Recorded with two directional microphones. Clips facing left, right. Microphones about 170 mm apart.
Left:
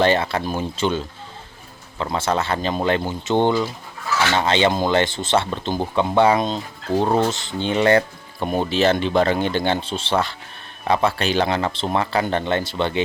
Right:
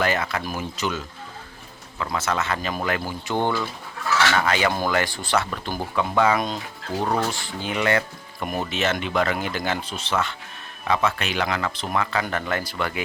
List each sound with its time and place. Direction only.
0.0 s speech: 30° left (ahead or behind)